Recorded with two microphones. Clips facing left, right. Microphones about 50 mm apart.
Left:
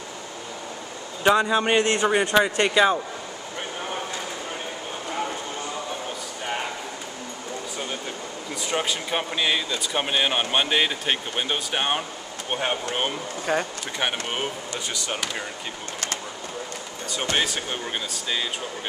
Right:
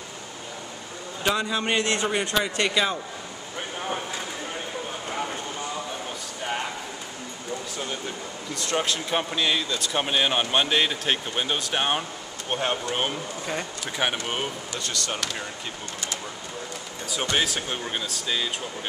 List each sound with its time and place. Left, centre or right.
1.2 s a man's voice: centre
6.4 s a sound: centre
8.5 s a man's voice: centre
14.2 s speech: centre
17.4 s speech: centre